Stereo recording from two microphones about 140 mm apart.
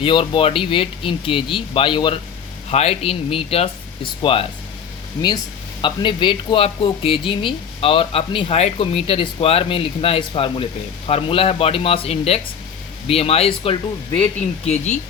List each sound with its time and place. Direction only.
0.0 s speech: 40° left (ahead or behind)
2.6 s speech: 45° left (ahead or behind)
5.8 s speech: 35° left (ahead or behind); by 14.9 s 55° left (ahead or behind)